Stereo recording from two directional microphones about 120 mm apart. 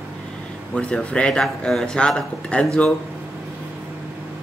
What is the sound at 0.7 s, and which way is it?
Speech, 10° left (ahead or behind).